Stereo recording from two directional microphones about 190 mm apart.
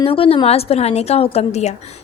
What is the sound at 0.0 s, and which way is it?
A woman's voice, 30° left (ahead or behind).